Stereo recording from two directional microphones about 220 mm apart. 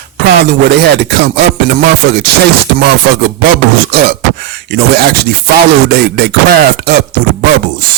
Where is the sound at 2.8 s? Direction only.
45° right (ahead or behind).